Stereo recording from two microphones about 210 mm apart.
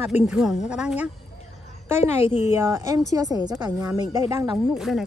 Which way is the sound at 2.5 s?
10° right (ahead or behind).